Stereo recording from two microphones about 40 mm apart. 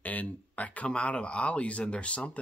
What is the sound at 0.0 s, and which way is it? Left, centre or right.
Speech, left.